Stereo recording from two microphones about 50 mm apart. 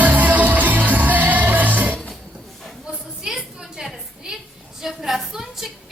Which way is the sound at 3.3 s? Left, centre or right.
Centre.